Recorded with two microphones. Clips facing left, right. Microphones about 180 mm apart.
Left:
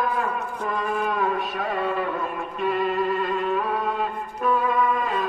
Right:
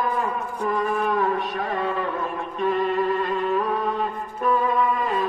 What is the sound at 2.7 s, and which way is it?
Music, centre (ahead or behind).